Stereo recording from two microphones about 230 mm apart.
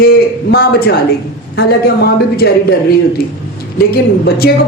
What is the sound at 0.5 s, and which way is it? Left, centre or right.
Speech, left.